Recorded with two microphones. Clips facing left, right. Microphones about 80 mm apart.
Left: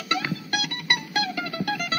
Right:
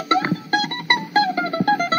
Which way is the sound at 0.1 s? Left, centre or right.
Right.